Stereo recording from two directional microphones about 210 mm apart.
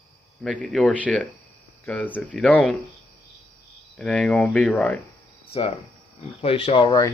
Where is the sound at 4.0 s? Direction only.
5° left (ahead or behind).